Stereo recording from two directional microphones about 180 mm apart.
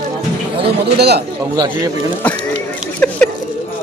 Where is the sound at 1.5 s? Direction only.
20° right (ahead or behind).